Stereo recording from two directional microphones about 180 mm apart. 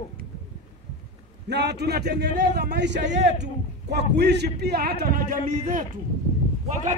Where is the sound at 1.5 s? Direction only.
70° right (ahead or behind).